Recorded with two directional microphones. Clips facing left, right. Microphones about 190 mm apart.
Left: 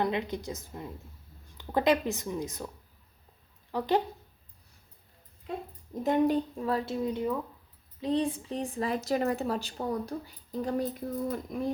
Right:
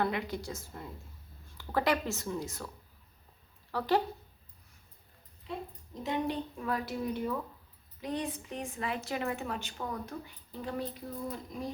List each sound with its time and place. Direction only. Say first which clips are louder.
0.0 s a woman's voice: left 3 dB; 20° left (ahead or behind)
3.7 s speech: left 2 dB; 20° left (ahead or behind)
5.5 s a woman's voice: left 3 dB; 50° left (ahead or behind)
6.7 s a woman's voice: left 1 dB; 25° left (ahead or behind)
11.5 s speech: left 6 dB; 55° left (ahead or behind)